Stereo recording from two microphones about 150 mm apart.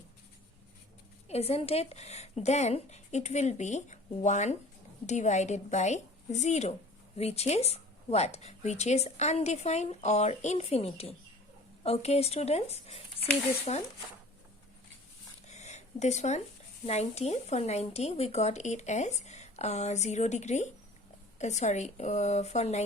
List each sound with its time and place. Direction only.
1.3 s speech: 45° left (ahead or behind)
15.4 s a sound: 50° left (ahead or behind)
16.8 s speech: 45° left (ahead or behind)